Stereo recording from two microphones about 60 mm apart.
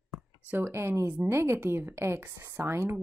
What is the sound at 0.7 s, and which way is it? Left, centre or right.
A woman's voice, right.